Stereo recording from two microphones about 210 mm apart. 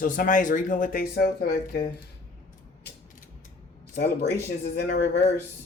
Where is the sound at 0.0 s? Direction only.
40° left (ahead or behind).